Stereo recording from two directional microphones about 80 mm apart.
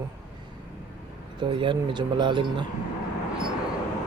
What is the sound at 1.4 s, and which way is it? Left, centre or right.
Speech, right.